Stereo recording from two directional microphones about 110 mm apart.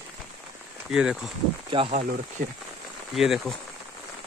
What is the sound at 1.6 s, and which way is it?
Speech, 55° right (ahead or behind).